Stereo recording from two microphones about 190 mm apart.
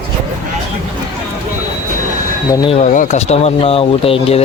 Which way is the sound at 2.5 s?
25° left (ahead or behind).